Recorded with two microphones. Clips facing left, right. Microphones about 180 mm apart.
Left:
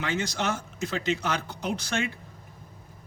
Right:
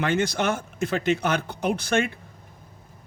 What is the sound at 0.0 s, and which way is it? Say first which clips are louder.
Speech: right 6 dB; 55° right (ahead or behind).